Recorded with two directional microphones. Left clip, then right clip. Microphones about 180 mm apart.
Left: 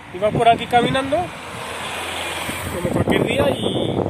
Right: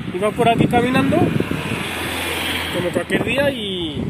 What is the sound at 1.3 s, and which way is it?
Vehicle, 45° right (ahead or behind).